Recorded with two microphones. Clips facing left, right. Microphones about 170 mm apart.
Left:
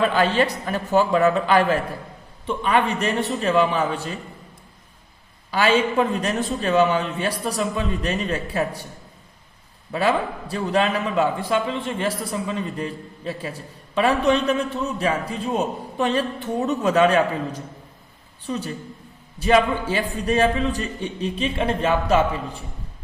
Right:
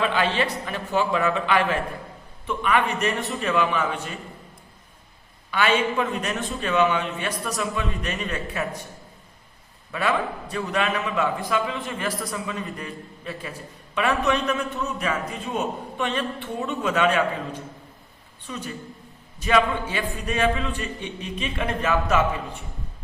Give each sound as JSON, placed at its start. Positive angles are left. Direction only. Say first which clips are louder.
{"t": 0.0, "sound": "a man's voice", "louder": "left 4 dB", "side_deg": 40}
{"t": 5.5, "sound": "a man's voice", "louder": "left 3 dB", "side_deg": 35}
{"t": 9.9, "sound": "a man's voice", "louder": "left 3 dB", "side_deg": 30}